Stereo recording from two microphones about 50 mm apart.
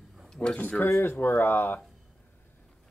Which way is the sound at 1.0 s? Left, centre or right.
Left.